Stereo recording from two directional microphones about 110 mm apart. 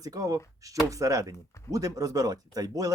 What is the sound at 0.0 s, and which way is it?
Speech, 30° right (ahead or behind).